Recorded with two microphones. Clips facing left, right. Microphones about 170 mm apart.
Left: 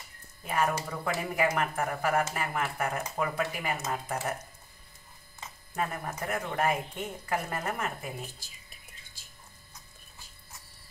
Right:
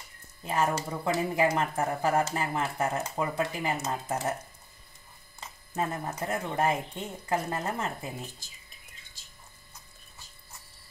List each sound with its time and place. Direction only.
0.5 s speech: 25° right (ahead or behind)
5.8 s speech: 25° right (ahead or behind)